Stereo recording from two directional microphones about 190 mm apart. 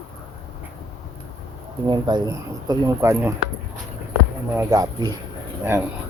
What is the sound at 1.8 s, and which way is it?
Speech, 25° right (ahead or behind).